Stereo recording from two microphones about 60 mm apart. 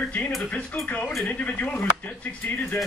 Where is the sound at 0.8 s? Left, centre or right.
Left.